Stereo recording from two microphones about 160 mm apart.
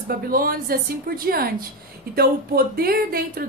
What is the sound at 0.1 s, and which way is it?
A woman's voice, 70° right (ahead or behind).